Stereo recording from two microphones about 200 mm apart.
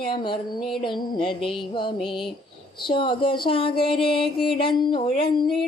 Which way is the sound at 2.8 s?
25° left (ahead or behind).